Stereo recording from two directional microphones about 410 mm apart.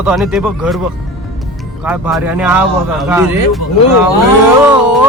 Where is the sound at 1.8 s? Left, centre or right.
Centre.